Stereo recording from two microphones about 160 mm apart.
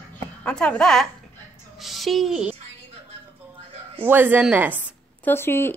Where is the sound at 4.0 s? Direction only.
10° right (ahead or behind).